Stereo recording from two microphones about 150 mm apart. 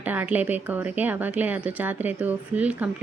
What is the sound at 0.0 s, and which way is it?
Speech, 10° right (ahead or behind).